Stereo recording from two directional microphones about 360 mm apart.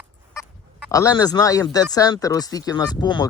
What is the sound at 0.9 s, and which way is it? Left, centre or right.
Speech, centre.